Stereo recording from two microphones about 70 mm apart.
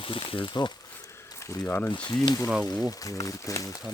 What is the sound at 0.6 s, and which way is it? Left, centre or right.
Speech, left.